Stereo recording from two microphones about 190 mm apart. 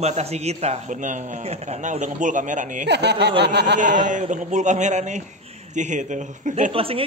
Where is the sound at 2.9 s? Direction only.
65° right (ahead or behind).